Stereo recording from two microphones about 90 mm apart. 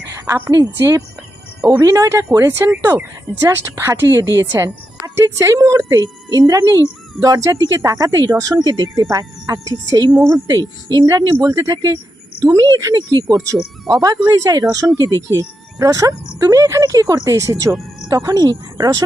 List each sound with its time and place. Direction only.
0.1 s a sound: 30° right (ahead or behind)
0.5 s a woman's voice: 40° right (ahead or behind)
9.0 s speech: 35° right (ahead or behind)
11.3 s speech: 35° right (ahead or behind)